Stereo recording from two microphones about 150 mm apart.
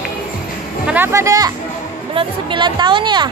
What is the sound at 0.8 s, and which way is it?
Speech, 15° right (ahead or behind).